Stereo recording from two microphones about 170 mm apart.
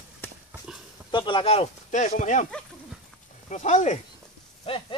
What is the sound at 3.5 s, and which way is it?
Speech, 45° left (ahead or behind).